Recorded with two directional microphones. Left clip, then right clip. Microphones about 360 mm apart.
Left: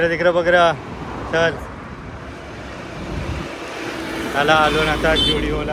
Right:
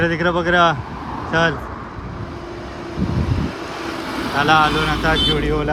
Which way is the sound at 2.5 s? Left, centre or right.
Right.